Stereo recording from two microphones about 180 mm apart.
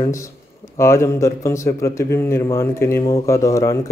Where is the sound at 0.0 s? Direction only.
15° left (ahead or behind).